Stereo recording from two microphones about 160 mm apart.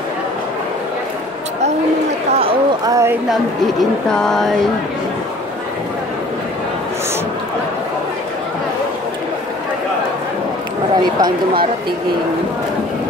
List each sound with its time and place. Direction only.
2.8 s a sound: 20° right (ahead or behind)
3.3 s speech: 5° left (ahead or behind)
11.1 s speech: 25° right (ahead or behind)